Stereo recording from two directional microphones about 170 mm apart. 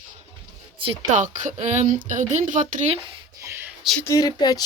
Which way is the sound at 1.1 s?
45° right (ahead or behind).